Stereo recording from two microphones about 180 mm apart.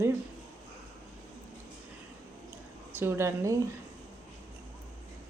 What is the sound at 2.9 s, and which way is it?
Speech, 15° right (ahead or behind).